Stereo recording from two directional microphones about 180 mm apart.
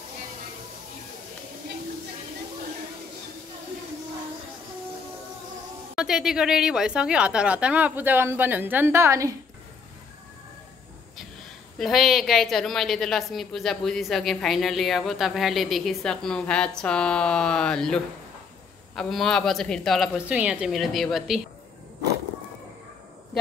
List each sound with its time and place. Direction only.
5.9 s a woman's voice: centre (ahead or behind)
11.8 s a woman's voice: centre (ahead or behind)